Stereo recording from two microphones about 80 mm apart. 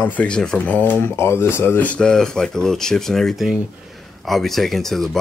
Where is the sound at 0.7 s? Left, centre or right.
Left.